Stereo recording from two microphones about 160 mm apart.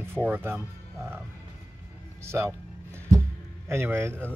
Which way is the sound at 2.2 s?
15° right (ahead or behind).